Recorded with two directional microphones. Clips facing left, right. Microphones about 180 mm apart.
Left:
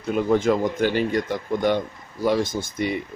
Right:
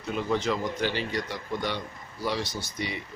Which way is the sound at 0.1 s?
50° left (ahead or behind).